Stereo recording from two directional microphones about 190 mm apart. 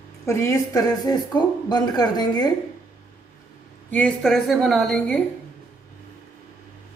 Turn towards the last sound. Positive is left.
turn(degrees=5)  # may be behind; listen again after turning